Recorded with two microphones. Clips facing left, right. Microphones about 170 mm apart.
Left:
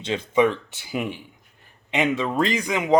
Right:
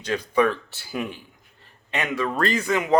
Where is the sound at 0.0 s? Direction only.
25° left (ahead or behind).